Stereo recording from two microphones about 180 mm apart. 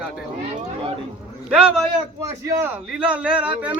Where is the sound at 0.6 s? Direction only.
30° right (ahead or behind).